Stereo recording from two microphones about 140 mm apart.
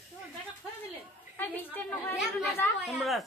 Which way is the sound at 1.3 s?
15° left (ahead or behind).